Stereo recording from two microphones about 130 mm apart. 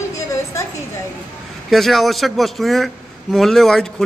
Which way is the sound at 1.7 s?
Centre (ahead or behind).